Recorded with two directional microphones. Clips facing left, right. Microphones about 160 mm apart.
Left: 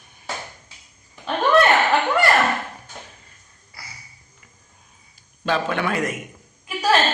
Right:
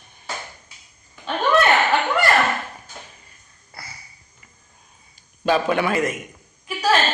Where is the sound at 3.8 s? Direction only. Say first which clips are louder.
Right 3 dB; 55° right (ahead or behind).